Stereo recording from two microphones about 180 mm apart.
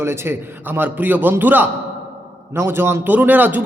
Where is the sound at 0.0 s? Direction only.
15° right (ahead or behind).